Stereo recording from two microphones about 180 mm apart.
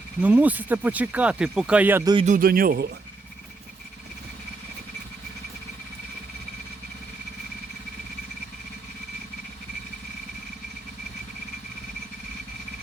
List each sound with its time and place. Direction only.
0.2 s speech: 10° right (ahead or behind)
2.2 s speech: 50° right (ahead or behind)